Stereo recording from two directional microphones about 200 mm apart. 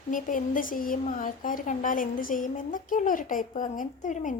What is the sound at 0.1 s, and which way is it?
Speech, 40° left (ahead or behind).